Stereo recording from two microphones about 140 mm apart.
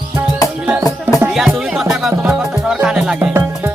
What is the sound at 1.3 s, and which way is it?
Music, 5° right (ahead or behind).